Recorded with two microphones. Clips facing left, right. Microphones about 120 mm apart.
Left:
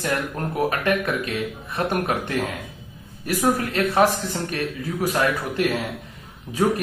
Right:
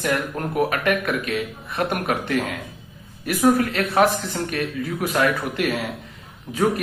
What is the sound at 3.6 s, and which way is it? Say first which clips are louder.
Speech: even; 30° left (ahead or behind).